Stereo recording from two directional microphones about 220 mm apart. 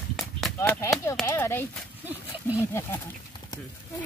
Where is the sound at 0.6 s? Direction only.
15° left (ahead or behind).